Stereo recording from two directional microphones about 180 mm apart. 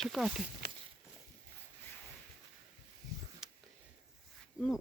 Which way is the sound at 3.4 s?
5° right (ahead or behind).